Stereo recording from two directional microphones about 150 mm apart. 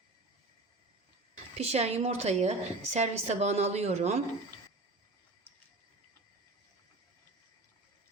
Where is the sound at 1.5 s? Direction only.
45° right (ahead or behind).